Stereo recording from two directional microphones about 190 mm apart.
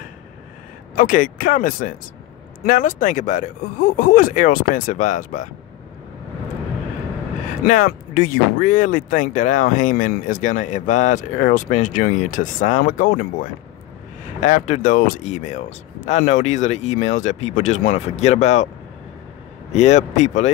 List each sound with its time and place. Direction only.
0.9 s speech: 45° left (ahead or behind)
7.6 s speech: 45° left (ahead or behind)
14.4 s speech: 40° left (ahead or behind)
19.7 s speech: 35° left (ahead or behind)